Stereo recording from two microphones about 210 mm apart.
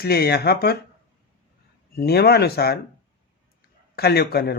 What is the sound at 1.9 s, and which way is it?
Speech, 50° left (ahead or behind).